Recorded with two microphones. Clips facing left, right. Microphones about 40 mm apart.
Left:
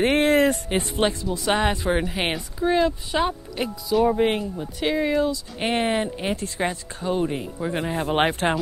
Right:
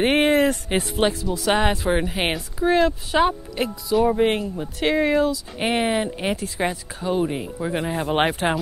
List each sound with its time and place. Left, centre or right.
0.0 s a sound: right
0.7 s speech: centre
4.4 s speech: centre